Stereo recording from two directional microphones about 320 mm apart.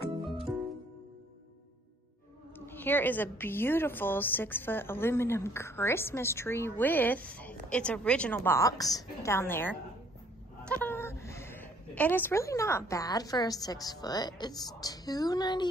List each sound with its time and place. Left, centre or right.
2.6 s a woman's voice: centre